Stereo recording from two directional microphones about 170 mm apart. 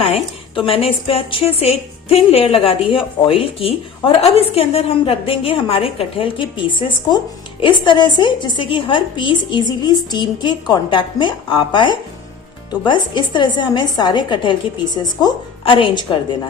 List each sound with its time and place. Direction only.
0.0 s a woman's voice: 35° left (ahead or behind)